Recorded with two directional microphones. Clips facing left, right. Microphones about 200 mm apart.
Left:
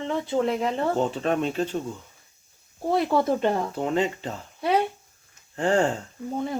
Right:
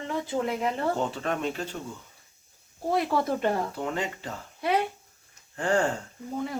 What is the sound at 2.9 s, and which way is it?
Speech, 25° left (ahead or behind).